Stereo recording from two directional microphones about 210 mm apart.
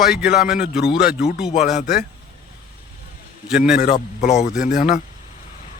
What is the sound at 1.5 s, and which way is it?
Speech, 35° left (ahead or behind).